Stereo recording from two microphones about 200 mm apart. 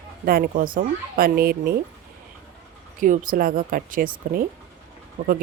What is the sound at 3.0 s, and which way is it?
Speech, 40° right (ahead or behind).